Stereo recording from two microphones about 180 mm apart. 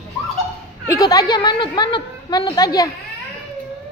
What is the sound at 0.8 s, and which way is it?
A woman's voice, 20° left (ahead or behind).